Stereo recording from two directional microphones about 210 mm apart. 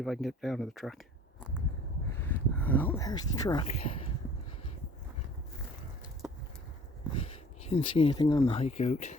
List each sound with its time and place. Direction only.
0.0 s speech: centre (ahead or behind)
2.1 s a sound: 10° left (ahead or behind)
7.2 s speech: 30° left (ahead or behind)